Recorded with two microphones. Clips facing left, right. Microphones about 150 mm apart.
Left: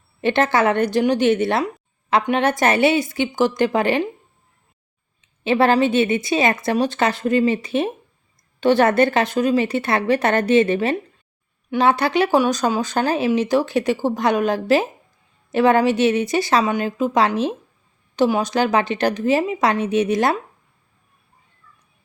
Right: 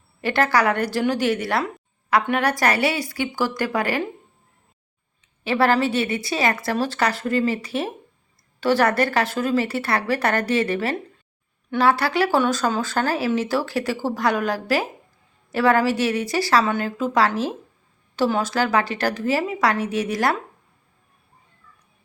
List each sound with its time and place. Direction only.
0.2 s a woman's voice: 20° left (ahead or behind)
5.4 s a woman's voice: 20° left (ahead or behind)